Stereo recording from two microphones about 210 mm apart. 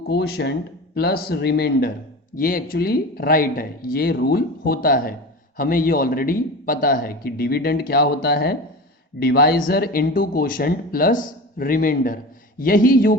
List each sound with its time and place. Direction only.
0.1 s a man's voice: 50° left (ahead or behind)